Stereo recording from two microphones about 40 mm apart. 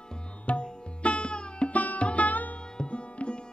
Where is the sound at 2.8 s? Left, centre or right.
Left.